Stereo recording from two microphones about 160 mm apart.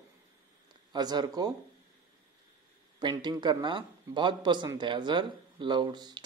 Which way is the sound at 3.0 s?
30° right (ahead or behind).